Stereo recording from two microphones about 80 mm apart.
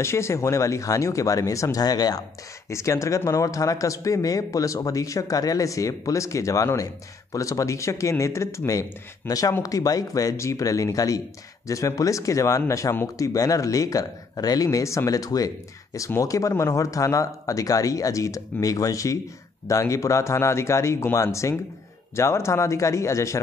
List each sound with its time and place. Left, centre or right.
0.0 s speech: left
2.7 s speech: left